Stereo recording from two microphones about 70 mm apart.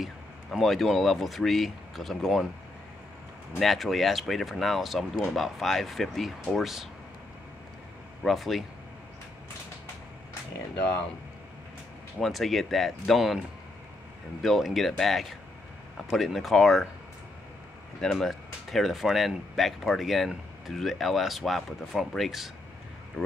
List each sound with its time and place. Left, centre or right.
0.0 s speech: centre
3.5 s speech: centre
8.2 s speech: centre
12.2 s speech: centre
14.4 s speech: centre
18.1 s speech: centre
23.2 s speech: left